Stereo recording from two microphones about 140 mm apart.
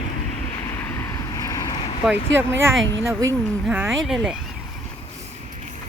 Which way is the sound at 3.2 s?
25° right (ahead or behind).